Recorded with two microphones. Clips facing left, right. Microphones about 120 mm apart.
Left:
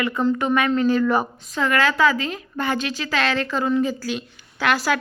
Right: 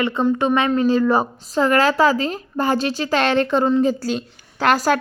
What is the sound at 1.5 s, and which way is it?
A woman's voice, 35° right (ahead or behind).